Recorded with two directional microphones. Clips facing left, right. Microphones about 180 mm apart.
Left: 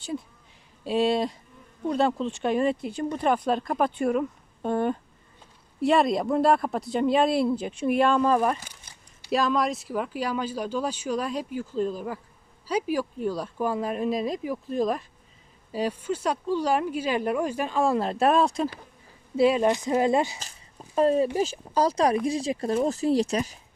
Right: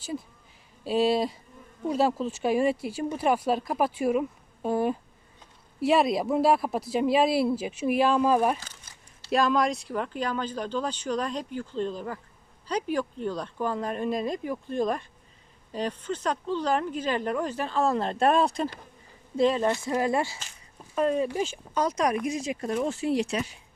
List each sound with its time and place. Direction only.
0.9 s speech: centre (ahead or behind)
19.4 s speech: 10° left (ahead or behind)
20.9 s speech: 35° left (ahead or behind)